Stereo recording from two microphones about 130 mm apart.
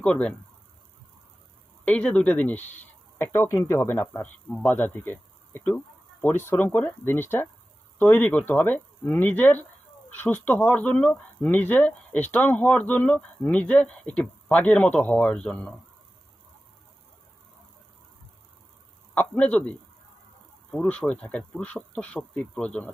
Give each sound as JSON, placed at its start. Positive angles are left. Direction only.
{"t": 0.0, "sound": "speech", "side_deg": 10}
{"t": 1.8, "sound": "speech", "side_deg": 10}
{"t": 4.4, "sound": "speech", "side_deg": 5}
{"t": 4.7, "sound": "speech", "side_deg": 15}
{"t": 19.1, "sound": "speech", "side_deg": 10}